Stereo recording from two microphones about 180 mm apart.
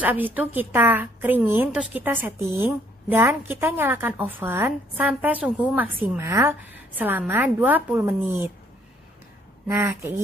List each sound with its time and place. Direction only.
0.0 s a woman's voice: 10° right (ahead or behind)
9.7 s a woman's voice: 15° right (ahead or behind)